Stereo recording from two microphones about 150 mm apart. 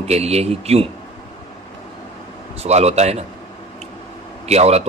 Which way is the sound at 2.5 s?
45° right (ahead or behind).